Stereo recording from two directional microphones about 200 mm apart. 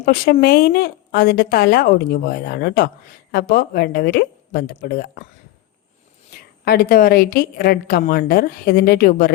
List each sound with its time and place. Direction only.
0.0 s speech: 50° left (ahead or behind)
6.7 s speech: 50° left (ahead or behind)